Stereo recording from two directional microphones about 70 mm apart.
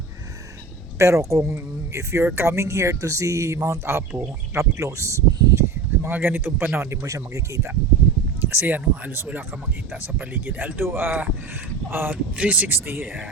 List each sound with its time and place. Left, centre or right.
0.9 s speech: right
5.5 s a sound: right
7.0 s speech: right
8.4 s speech: right
12.1 s speech: centre